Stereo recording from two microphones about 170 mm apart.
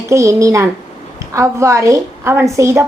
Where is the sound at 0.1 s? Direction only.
20° right (ahead or behind).